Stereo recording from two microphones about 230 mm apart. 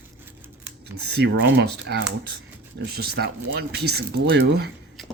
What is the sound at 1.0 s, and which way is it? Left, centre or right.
Speech, right.